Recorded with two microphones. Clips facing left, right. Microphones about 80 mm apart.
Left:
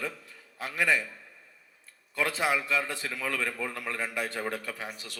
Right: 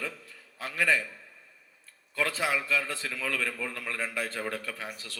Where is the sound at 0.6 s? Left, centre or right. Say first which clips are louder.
Even; centre.